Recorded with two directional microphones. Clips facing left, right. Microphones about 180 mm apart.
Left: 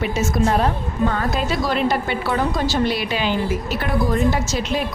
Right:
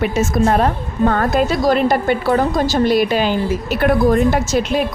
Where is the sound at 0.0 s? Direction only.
55° right (ahead or behind).